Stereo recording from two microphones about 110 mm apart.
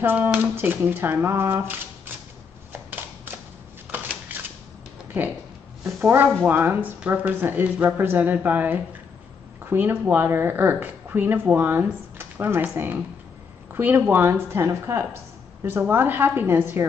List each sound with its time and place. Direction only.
0.0 s speech: 20° right (ahead or behind)
3.9 s shuffling cards: 15° right (ahead or behind)
5.9 s speech: 20° right (ahead or behind)